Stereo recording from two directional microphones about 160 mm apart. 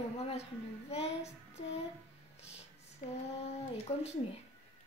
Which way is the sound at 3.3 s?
40° left (ahead or behind).